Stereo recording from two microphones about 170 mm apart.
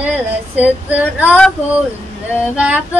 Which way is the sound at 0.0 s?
10° right (ahead or behind).